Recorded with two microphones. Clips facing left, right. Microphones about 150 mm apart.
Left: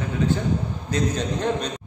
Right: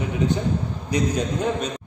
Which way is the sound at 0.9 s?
10° right (ahead or behind).